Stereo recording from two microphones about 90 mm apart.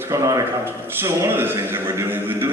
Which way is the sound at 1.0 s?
25° right (ahead or behind).